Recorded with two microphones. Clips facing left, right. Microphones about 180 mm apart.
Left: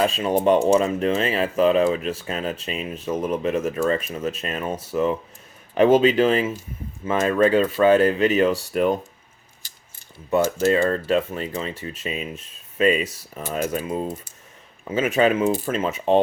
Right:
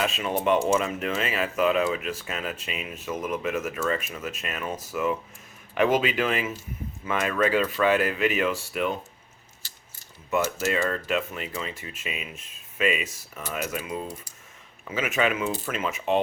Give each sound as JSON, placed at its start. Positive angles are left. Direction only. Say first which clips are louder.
{"t": 0.0, "sound": "speech", "louder": "left 6 dB", "side_deg": 35}
{"t": 10.6, "sound": "speech", "louder": "left 7 dB", "side_deg": 35}